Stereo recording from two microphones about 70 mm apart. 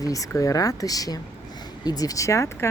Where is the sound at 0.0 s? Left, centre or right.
Left.